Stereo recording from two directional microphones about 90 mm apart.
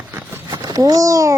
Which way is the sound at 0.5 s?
50° right (ahead or behind).